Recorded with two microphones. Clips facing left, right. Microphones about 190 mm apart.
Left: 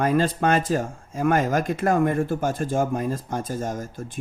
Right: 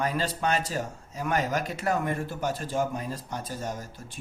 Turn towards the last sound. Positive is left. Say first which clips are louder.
# left 6 dB
turn(degrees=50)  # may be behind; listen again after turning